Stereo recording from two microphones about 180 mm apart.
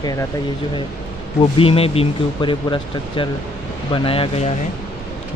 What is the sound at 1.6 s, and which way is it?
Speech, 30° left (ahead or behind).